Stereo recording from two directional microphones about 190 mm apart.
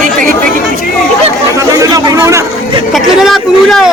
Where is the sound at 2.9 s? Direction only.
Centre (ahead or behind).